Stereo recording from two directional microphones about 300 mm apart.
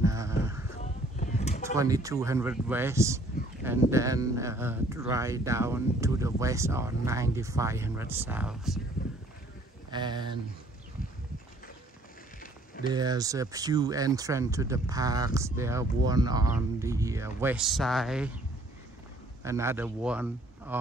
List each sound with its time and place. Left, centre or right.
0.0 s a sound: centre
1.2 s a sound: left
1.8 s speech: centre
9.8 s speech: centre
12.9 s speech: centre
19.4 s a man's voice: centre